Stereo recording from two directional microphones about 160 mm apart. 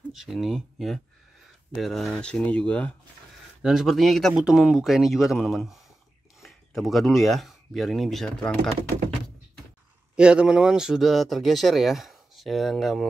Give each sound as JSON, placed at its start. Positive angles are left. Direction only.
{"t": 0.1, "sound": "speech", "side_deg": 0}
{"t": 10.1, "sound": "speech", "side_deg": -5}